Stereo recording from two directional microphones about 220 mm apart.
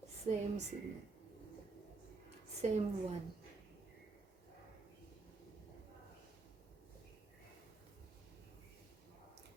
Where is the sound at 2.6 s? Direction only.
30° right (ahead or behind).